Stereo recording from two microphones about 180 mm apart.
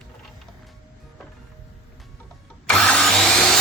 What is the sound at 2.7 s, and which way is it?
Vacuum cleaner, 5° left (ahead or behind).